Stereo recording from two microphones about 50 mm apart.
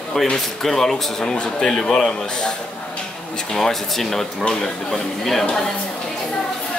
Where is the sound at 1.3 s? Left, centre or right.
Centre.